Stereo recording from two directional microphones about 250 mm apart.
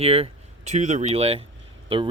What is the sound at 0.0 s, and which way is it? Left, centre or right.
Speech, right.